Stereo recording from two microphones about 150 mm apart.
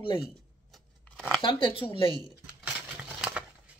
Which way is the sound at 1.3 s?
35° left (ahead or behind).